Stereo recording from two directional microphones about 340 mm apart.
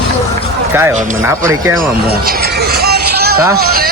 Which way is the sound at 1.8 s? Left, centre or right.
Right.